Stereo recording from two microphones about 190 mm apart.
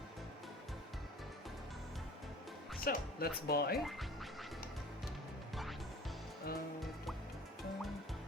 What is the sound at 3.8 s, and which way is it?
Music, centre (ahead or behind).